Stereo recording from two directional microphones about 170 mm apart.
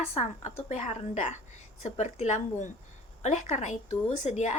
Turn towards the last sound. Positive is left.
turn(degrees=45)  # may be behind; listen again after turning